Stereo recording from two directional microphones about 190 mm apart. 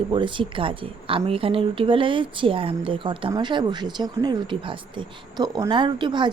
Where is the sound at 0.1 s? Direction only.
25° right (ahead or behind).